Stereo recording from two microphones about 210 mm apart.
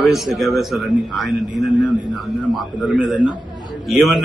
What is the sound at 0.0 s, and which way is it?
A man's voice, centre (ahead or behind).